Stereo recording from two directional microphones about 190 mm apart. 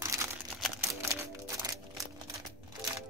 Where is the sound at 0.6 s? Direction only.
5° left (ahead or behind).